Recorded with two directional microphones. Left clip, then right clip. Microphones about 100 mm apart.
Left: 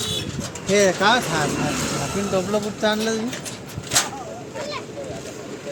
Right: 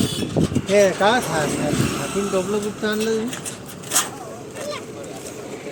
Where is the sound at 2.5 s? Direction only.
60° left (ahead or behind).